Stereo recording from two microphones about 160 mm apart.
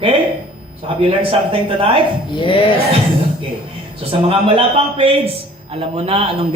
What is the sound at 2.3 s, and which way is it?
Speech, 30° left (ahead or behind).